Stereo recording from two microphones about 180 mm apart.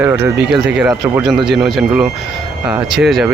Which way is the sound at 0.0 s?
10° right (ahead or behind).